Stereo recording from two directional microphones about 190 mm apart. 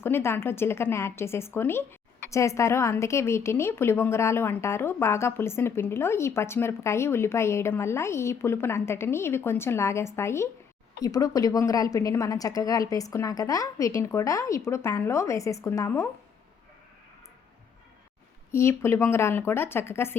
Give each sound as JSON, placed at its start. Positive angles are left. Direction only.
{"t": 0.0, "sound": "a woman's voice", "side_deg": 10}
{"t": 18.5, "sound": "a woman's voice", "side_deg": 15}